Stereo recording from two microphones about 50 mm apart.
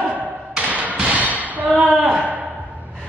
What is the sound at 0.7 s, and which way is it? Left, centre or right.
Thump, right.